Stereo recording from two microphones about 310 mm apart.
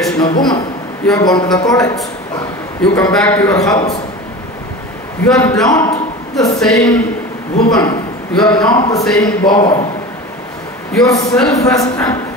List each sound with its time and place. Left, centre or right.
0.2 s a man's voice: centre
5.2 s a man's voice: centre
8.4 s speech: centre
8.7 s a man's voice: centre
9.0 s speech: centre
9.4 s a man's voice: centre
10.9 s a man's voice: centre